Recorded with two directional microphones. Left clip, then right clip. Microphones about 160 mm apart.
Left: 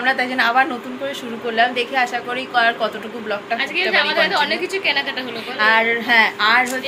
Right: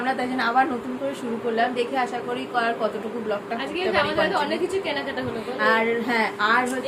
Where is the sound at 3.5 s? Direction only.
30° right (ahead or behind).